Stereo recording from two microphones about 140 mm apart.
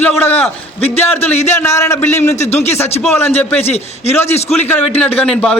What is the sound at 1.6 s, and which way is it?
Speech, 20° left (ahead or behind).